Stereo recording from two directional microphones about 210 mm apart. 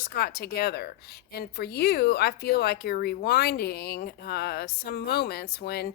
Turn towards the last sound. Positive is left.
turn(degrees=50)  # may be behind; listen again after turning